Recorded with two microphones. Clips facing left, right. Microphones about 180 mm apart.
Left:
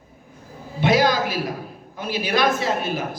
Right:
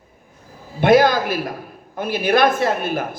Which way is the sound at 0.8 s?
55° right (ahead or behind).